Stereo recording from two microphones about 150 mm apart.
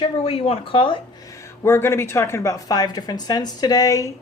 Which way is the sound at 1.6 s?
15° left (ahead or behind).